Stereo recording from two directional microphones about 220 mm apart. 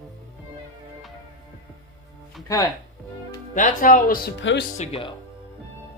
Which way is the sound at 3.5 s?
35° left (ahead or behind).